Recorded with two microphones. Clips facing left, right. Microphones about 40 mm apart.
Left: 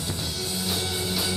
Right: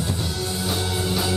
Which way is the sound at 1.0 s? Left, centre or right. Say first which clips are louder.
Right 6 dB; centre.